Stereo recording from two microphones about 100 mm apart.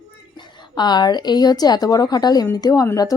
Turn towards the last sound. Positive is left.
turn(degrees=35)  # may be behind; listen again after turning